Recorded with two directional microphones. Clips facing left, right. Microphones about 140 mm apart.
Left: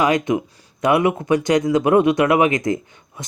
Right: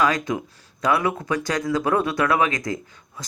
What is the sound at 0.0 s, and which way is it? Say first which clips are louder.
Speech: left 4 dB; 20° left (ahead or behind).